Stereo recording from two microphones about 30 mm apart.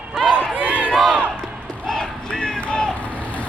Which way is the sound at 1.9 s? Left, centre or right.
Left.